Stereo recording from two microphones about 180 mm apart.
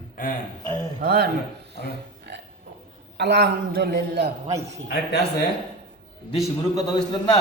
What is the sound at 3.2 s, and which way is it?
A man's voice, 70° right (ahead or behind).